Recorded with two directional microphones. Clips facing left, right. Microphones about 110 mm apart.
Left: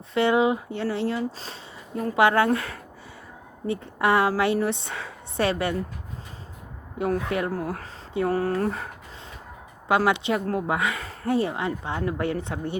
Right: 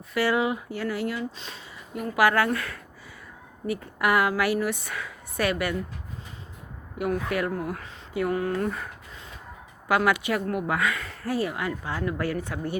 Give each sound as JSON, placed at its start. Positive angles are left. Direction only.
{"t": 0.1, "sound": "speech", "side_deg": 25}
{"t": 7.3, "sound": "speech", "side_deg": 25}
{"t": 9.9, "sound": "speech", "side_deg": 25}